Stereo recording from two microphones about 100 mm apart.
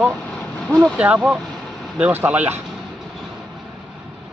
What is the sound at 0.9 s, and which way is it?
Speech, 10° right (ahead or behind).